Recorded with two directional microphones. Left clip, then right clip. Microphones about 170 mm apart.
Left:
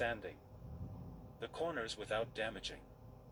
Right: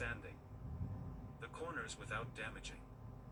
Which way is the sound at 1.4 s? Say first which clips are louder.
Left 6 dB; 75° left (ahead or behind).